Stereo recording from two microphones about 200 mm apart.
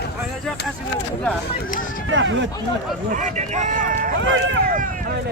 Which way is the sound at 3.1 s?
40° right (ahead or behind).